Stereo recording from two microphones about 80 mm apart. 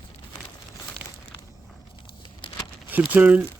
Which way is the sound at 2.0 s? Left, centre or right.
Left.